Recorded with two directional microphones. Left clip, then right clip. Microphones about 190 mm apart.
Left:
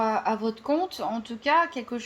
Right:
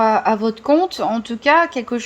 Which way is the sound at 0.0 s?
35° right (ahead or behind).